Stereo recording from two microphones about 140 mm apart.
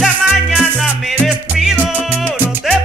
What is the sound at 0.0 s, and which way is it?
Music, centre (ahead or behind).